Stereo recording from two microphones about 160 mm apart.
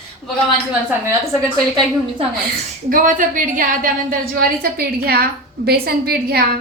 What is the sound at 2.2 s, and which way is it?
Speech, 35° right (ahead or behind).